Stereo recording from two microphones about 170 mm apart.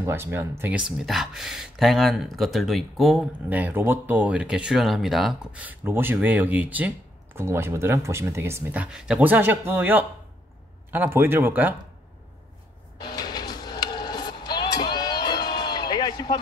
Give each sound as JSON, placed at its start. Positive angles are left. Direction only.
{"t": 0.0, "sound": "speech", "side_deg": -15}
{"t": 13.0, "sound": "music", "side_deg": 25}